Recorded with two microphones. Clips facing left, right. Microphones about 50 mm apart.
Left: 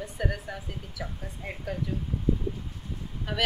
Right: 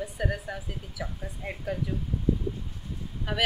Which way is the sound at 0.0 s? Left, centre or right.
Centre.